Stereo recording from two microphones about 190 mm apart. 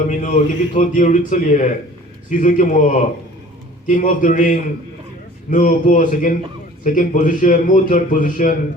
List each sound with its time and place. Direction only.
0.1 s a man's voice: 40° left (ahead or behind)